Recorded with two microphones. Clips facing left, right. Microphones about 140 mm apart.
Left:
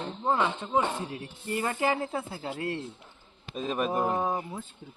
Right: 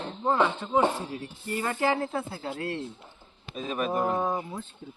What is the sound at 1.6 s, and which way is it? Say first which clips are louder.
Speech: right 2 dB; 10° left (ahead or behind).